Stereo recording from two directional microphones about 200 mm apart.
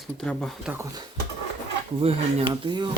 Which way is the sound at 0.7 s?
15° right (ahead or behind).